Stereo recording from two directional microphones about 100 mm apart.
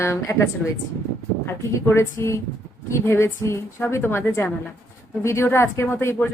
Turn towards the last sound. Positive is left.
turn(degrees=25)  # may be behind; listen again after turning